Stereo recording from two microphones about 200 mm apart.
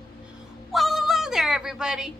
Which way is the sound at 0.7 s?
Centre (ahead or behind).